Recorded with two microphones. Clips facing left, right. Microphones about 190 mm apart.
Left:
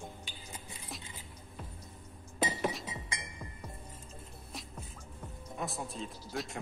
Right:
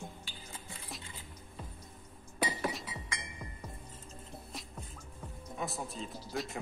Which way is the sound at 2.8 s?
25° left (ahead or behind).